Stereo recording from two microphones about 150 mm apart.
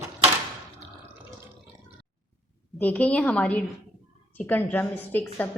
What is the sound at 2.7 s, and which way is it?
A woman's voice, 10° left (ahead or behind).